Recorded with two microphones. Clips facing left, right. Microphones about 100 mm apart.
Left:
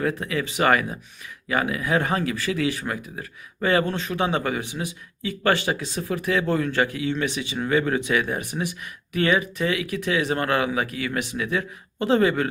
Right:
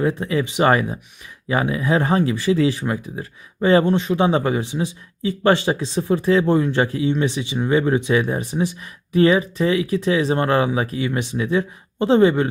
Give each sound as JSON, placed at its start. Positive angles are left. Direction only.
{"t": 0.0, "sound": "speech", "side_deg": -25}